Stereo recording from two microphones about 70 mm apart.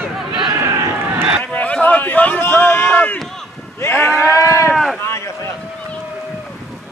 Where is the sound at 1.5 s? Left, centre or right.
Left.